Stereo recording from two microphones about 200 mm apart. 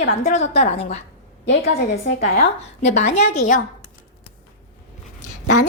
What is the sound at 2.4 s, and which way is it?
A woman's voice, 35° left (ahead or behind).